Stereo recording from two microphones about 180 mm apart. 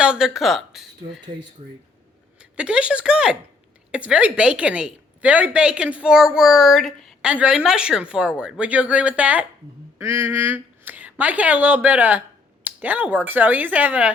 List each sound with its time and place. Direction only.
0.0 s speech: 5° right (ahead or behind)
1.6 s speech: 35° right (ahead or behind)
2.4 s a woman's voice: 5° right (ahead or behind)